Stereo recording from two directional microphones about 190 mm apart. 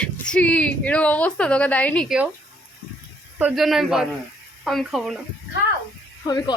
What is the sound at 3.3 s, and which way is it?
Speech, 5° right (ahead or behind).